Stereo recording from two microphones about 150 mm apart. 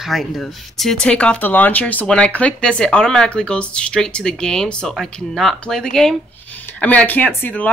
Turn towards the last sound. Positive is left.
turn(degrees=10)  # may be behind; listen again after turning